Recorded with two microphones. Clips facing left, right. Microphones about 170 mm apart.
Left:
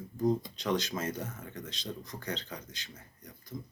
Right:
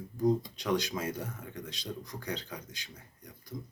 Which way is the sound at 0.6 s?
10° right (ahead or behind).